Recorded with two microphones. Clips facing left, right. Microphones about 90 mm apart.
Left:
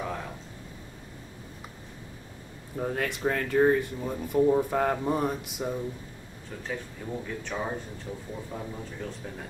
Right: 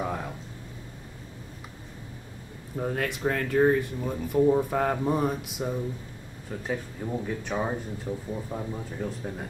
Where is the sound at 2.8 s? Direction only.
Centre (ahead or behind).